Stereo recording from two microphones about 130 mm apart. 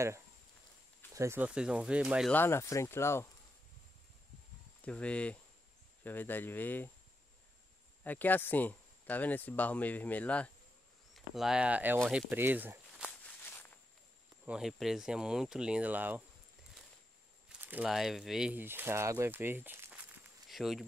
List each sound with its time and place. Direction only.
1.1 s speech: 20° right (ahead or behind)
1.4 s speech: 5° right (ahead or behind)
2.3 s speech: 20° left (ahead or behind)
4.8 s speech: 10° left (ahead or behind)
8.0 s speech: 15° left (ahead or behind)
11.1 s speech: centre (ahead or behind)
13.0 s walk: 15° left (ahead or behind)
14.4 s speech: 5° right (ahead or behind)
17.5 s a sound: 15° right (ahead or behind)
17.8 s speech: 5° right (ahead or behind)
18.5 s speech: 15° right (ahead or behind)
20.4 s speech: centre (ahead or behind)